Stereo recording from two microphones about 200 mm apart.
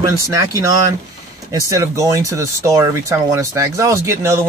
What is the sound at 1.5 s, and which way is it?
Speech, 15° right (ahead or behind).